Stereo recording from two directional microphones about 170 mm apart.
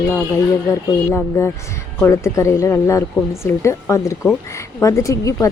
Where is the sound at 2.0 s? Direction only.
15° left (ahead or behind).